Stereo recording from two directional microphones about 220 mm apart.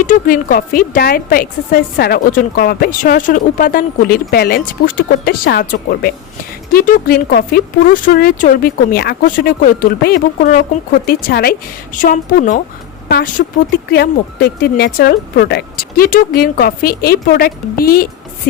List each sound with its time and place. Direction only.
0.0 s a woman's voice: 40° left (ahead or behind)